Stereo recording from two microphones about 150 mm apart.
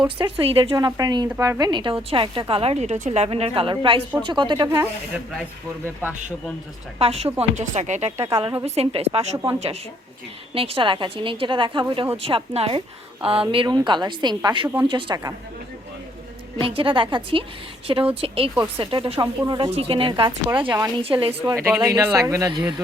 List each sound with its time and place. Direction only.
0.3 s a woman's voice: 35° right (ahead or behind)
4.7 s speech: 15° right (ahead or behind)
7.0 s a woman's voice: 45° right (ahead or behind)
9.3 s speech: 25° right (ahead or behind)
10.5 s a woman's voice: 40° right (ahead or behind)
16.6 s a woman's voice: 35° right (ahead or behind)
21.5 s speech: 15° right (ahead or behind)